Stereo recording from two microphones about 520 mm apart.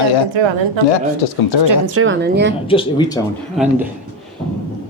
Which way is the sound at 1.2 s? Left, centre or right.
Left.